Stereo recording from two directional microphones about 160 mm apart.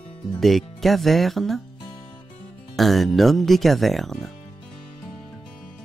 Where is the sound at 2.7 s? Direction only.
Centre (ahead or behind).